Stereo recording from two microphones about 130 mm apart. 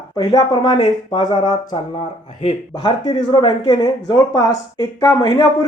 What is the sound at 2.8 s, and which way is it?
Speech, 35° left (ahead or behind).